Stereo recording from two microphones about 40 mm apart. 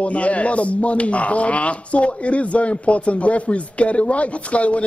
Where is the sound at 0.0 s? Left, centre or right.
Left.